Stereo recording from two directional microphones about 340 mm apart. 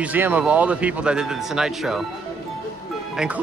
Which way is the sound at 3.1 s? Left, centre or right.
Centre.